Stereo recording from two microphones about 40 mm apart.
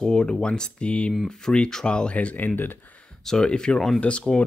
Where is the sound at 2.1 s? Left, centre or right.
Left.